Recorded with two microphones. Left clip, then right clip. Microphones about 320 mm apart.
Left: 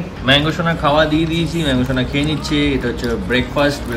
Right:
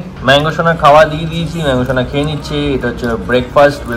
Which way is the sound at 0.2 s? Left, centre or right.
Centre.